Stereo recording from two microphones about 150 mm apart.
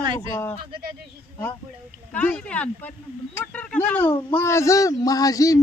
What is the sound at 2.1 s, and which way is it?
A man's voice, 10° left (ahead or behind).